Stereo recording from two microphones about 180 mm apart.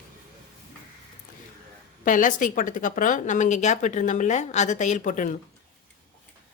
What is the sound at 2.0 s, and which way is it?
Speech, 45° left (ahead or behind).